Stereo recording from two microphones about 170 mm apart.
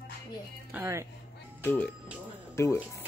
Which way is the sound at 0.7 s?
15° right (ahead or behind).